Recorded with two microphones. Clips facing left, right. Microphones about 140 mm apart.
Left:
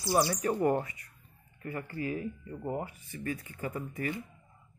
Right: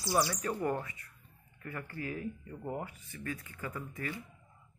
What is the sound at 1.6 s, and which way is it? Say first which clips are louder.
Speech: left 5 dB; 15° left (ahead or behind).